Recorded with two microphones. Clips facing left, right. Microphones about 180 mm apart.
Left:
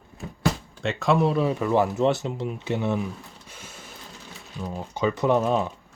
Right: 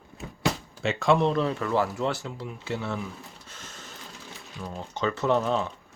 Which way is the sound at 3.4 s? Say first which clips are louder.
Left 1 dB; 10° left (ahead or behind).